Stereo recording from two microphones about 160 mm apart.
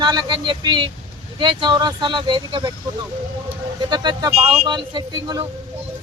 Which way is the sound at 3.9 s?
25° right (ahead or behind).